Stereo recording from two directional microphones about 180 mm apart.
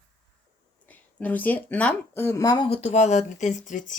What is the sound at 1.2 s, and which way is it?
Speech, 10° left (ahead or behind).